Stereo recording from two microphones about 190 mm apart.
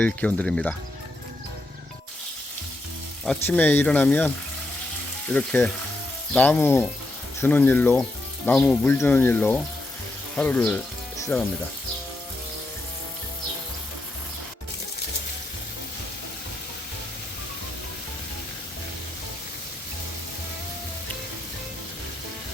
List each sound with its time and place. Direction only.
0.0 s speech: 5° left (ahead or behind)
3.2 s speech: 10° left (ahead or behind)
5.3 s speech: 5° left (ahead or behind)